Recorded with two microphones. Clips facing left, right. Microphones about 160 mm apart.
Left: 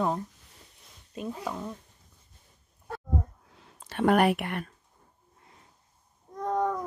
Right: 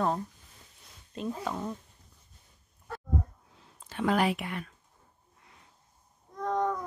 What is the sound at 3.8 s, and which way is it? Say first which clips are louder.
Speech: left 5 dB; 65° left (ahead or behind).